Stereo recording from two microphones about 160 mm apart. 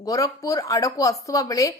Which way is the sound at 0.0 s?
20° left (ahead or behind).